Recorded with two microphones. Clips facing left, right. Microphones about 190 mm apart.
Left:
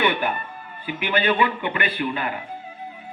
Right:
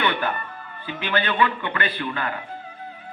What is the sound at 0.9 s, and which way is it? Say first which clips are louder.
Speech: left 3 dB; 15° left (ahead or behind).